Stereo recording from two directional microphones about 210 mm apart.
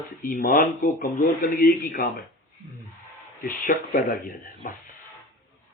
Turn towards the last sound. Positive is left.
turn(degrees=40)  # may be behind; listen again after turning